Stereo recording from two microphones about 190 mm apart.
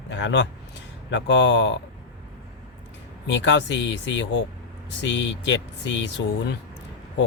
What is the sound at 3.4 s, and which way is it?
Speech, 70° left (ahead or behind).